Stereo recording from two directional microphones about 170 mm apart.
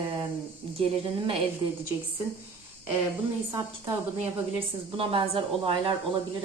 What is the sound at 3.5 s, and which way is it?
Speech, 20° right (ahead or behind).